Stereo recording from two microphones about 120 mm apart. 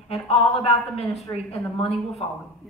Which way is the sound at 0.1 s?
55° left (ahead or behind).